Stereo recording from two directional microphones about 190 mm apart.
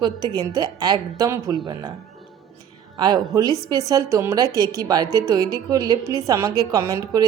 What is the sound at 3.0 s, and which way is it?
A woman's voice, 20° right (ahead or behind).